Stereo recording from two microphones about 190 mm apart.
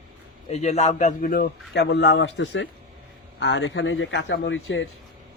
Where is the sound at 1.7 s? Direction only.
60° left (ahead or behind); by 4.9 s 85° left.